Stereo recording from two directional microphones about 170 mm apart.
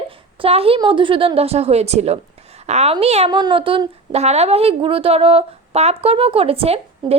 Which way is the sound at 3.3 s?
25° right (ahead or behind).